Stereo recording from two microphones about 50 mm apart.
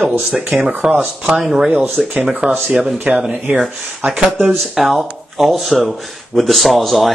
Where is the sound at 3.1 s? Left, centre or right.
Centre.